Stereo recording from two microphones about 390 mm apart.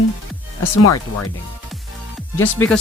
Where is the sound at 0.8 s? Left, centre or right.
Left.